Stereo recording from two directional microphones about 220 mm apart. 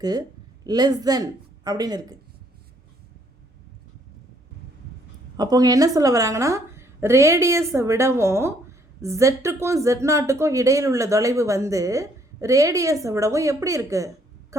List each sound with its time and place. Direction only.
0.0 s speech: 20° right (ahead or behind)
5.4 s speech: 15° right (ahead or behind)